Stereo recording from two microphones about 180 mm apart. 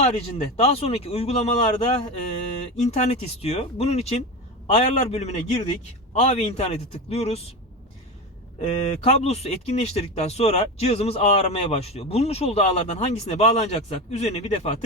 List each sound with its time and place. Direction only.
0.0 s speech: 35° left (ahead or behind)
8.6 s speech: 35° left (ahead or behind)